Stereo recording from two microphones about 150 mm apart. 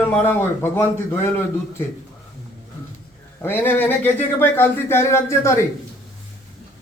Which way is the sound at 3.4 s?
15° left (ahead or behind).